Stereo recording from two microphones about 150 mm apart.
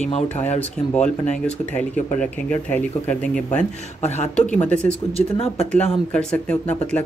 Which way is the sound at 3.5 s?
50° left (ahead or behind).